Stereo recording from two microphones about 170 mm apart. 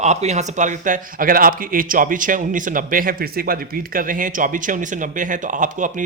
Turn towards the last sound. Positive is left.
turn(degrees=-50)  # may be behind; listen again after turning